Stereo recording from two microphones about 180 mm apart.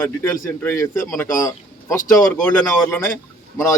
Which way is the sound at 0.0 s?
10° left (ahead or behind).